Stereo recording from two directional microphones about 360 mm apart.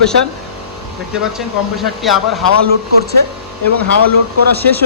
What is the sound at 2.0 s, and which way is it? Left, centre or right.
Speech, centre.